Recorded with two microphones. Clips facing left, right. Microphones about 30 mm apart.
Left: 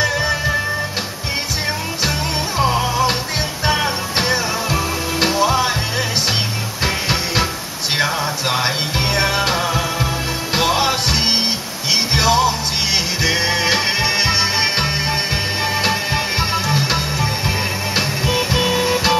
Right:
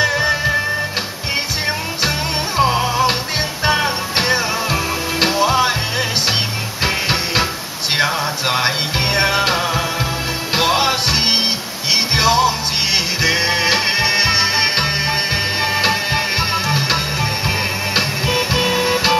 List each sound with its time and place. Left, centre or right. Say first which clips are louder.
0.0 s music: right 2 dB; centre
2.0 s music: right 1 dB; right
10.5 s music: right 1 dB; right